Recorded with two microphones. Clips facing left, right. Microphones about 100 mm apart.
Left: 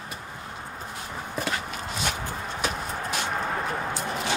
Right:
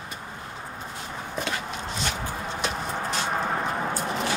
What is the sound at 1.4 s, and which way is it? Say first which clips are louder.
Walk: even; 5° left (ahead or behind).